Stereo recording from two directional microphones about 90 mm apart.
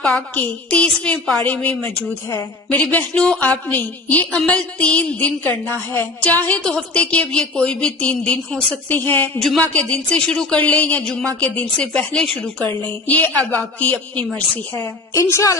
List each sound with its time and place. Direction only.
0.3 s a woman's voice: 15° left (ahead or behind)
12.6 s a woman's voice: 20° left (ahead or behind)
15.1 s a woman's voice: 35° left (ahead or behind)